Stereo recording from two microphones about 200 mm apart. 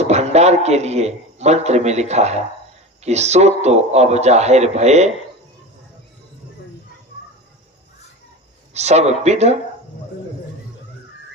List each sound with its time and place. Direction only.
0.0 s a man's voice: 35° right (ahead or behind)
8.7 s a man's voice: 35° right (ahead or behind)